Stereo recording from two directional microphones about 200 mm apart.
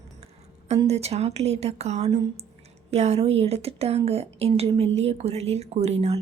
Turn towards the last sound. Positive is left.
turn(degrees=-30)  # may be behind; listen again after turning